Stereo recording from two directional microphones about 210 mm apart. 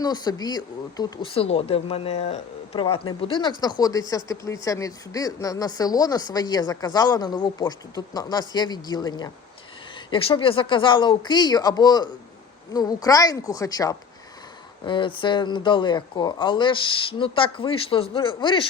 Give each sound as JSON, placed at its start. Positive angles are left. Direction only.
{"t": 0.0, "sound": "speech", "side_deg": 20}